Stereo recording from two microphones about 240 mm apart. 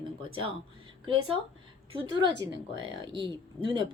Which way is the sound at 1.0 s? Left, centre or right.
Right.